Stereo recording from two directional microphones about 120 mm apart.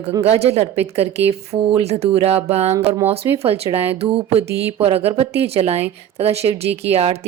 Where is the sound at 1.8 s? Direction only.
60° right (ahead or behind).